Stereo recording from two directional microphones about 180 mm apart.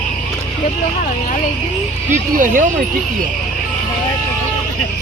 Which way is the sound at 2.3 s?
45° right (ahead or behind).